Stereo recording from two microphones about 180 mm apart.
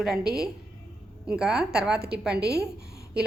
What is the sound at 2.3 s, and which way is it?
Speech, 65° right (ahead or behind).